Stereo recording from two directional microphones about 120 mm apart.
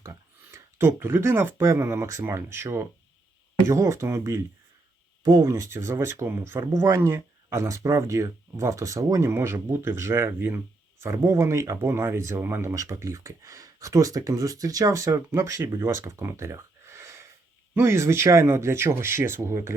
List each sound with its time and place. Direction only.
0.0 s speech: 25° right (ahead or behind)